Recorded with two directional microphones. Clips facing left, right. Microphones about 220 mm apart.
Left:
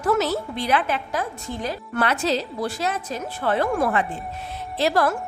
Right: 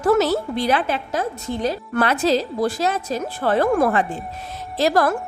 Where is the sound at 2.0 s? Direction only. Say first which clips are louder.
Right 4 dB; 40° right (ahead or behind).